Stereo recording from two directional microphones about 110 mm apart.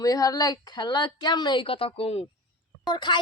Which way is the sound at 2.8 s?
45° left (ahead or behind).